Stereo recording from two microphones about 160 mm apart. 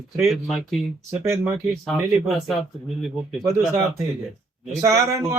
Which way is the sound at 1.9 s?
Centre (ahead or behind).